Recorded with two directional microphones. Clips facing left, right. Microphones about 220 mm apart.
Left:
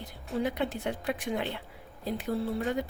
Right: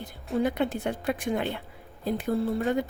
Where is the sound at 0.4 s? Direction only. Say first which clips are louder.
Right 3 dB; 50° right (ahead or behind).